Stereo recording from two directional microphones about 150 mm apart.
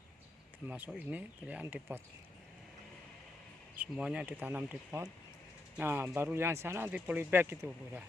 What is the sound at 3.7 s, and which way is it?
Speech, 5° right (ahead or behind).